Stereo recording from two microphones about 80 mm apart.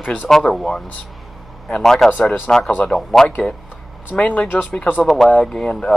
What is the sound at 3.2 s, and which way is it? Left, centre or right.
A man's voice, centre.